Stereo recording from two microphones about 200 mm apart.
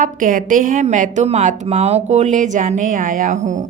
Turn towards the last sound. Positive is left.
turn(degrees=-35)  # may be behind; listen again after turning